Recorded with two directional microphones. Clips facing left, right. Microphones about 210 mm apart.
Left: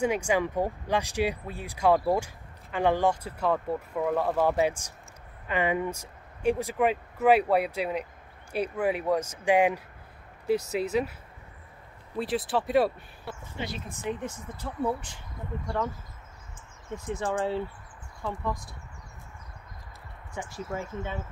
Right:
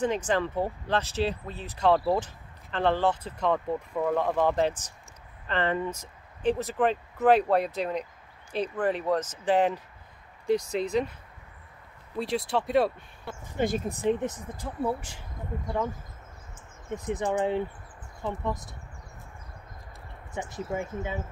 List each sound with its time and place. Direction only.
0.0 s speech: 10° left (ahead or behind)
12.2 s speech: centre (ahead or behind)
13.6 s speech: 45° right (ahead or behind)
14.2 s speech: 10° right (ahead or behind)
15.6 s speech: 20° right (ahead or behind)
16.9 s speech: 20° right (ahead or behind)
20.3 s speech: 20° right (ahead or behind)